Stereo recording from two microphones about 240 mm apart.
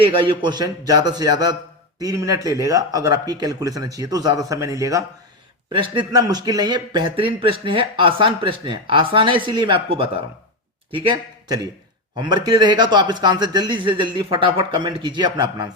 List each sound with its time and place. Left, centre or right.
0.0 s speech: right